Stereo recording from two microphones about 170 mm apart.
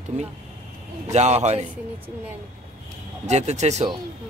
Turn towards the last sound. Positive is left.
turn(degrees=-40)  # may be behind; listen again after turning